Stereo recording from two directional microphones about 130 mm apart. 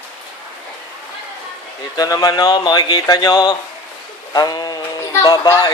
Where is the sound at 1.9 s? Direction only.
30° left (ahead or behind).